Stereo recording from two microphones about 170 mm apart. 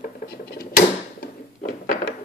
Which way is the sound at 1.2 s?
60° left (ahead or behind).